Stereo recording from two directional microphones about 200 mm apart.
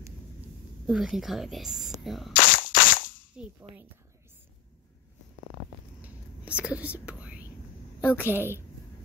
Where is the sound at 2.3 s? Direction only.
40° left (ahead or behind).